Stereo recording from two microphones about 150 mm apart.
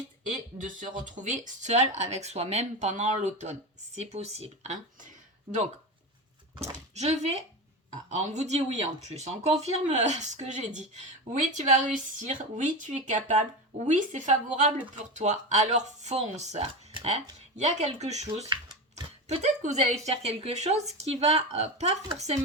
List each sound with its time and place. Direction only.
1.0 s speech: 55° right (ahead or behind)